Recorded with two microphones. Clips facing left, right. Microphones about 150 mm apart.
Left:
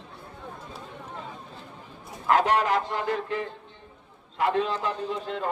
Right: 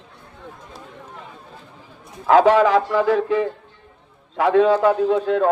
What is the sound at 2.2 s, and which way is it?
Speech, 90° right.